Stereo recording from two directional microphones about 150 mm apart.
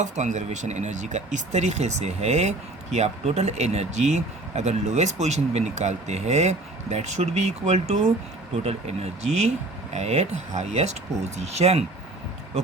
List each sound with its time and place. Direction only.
0.0 s speech: 55° right (ahead or behind)